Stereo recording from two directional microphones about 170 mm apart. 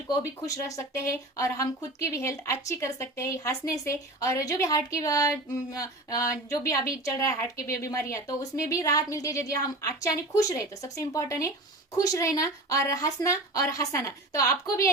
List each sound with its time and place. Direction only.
0.1 s a woman's voice: 20° left (ahead or behind)